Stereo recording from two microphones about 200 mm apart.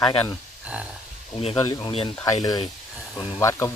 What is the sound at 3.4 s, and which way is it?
Speech, 15° left (ahead or behind).